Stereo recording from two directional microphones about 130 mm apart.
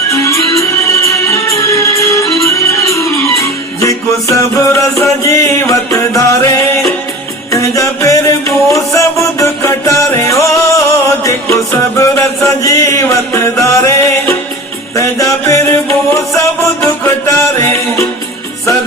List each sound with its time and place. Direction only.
0.1 s music: 25° left (ahead or behind)